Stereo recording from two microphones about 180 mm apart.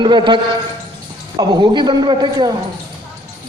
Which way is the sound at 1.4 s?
25° right (ahead or behind).